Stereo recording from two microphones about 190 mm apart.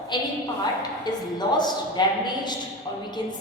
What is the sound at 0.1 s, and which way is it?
A woman's voice, 25° left (ahead or behind).